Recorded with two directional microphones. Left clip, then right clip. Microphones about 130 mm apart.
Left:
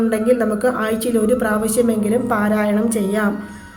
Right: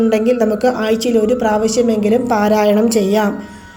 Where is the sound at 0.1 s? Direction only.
20° right (ahead or behind).